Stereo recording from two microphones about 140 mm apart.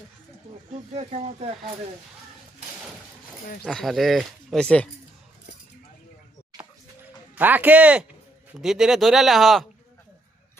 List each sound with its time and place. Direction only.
0.9 s speech: 50° right (ahead or behind)
3.7 s speech: centre (ahead or behind)
7.3 s speech: 10° right (ahead or behind)